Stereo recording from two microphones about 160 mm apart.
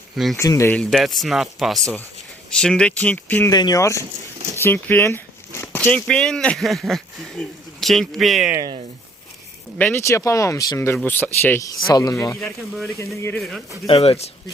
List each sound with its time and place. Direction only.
0.3 s speech: 20° left (ahead or behind)
0.7 s speech: 5° left (ahead or behind)
3.5 s speech: 25° left (ahead or behind)
4.6 s a sound: 15° left (ahead or behind)
5.8 s speech: 5° left (ahead or behind)
8.5 s speech: 25° right (ahead or behind)
9.7 s speech: 15° left (ahead or behind)
12.4 s speech: centre (ahead or behind)
13.1 s speech: 15° left (ahead or behind)
13.8 s speech: 40° left (ahead or behind)